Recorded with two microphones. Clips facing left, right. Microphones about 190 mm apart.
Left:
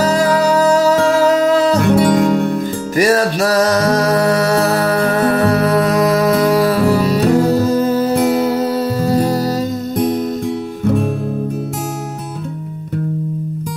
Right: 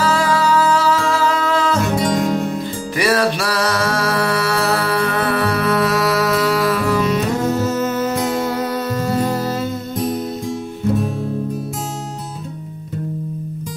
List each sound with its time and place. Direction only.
0.0 s music: 40° left (ahead or behind)
2.0 s music: 65° left (ahead or behind)
3.0 s music: 45° left (ahead or behind)